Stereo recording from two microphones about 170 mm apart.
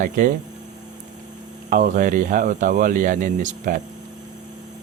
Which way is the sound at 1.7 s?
50° right (ahead or behind).